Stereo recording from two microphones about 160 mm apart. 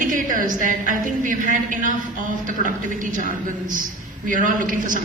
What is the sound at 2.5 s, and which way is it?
Music, 55° right (ahead or behind).